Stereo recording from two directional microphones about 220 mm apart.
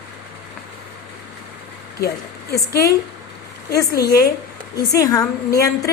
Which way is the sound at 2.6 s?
15° left (ahead or behind).